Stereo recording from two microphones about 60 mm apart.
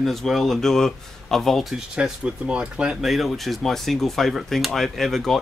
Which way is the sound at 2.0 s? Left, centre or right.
Centre.